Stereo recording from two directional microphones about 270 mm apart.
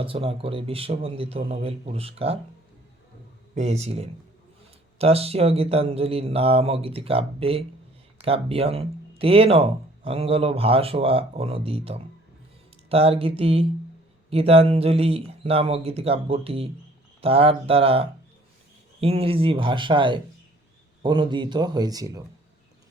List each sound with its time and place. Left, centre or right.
0.0 s speech: centre
3.5 s speech: right